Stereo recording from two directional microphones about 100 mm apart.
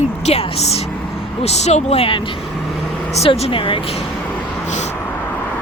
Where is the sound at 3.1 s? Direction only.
90° left; by 4.0 s 60° left (ahead or behind).